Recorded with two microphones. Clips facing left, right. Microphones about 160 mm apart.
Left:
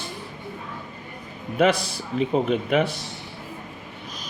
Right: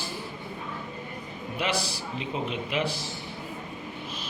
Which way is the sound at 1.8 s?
30° right (ahead or behind).